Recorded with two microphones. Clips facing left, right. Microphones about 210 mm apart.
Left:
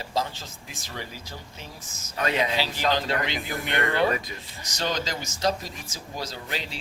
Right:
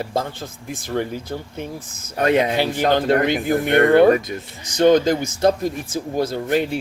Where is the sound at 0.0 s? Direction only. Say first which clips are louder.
Right 5 dB; 55° right (ahead or behind).